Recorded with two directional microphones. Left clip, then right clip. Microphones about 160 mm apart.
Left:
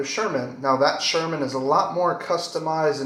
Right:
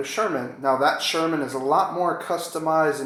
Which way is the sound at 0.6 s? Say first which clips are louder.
Even; 10° right (ahead or behind).